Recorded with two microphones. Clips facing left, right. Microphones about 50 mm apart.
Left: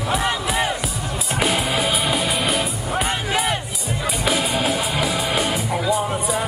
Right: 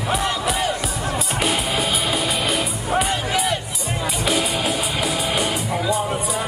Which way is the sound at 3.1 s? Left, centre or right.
Centre.